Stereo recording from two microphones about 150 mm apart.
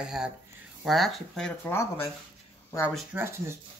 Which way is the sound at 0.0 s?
5° right (ahead or behind).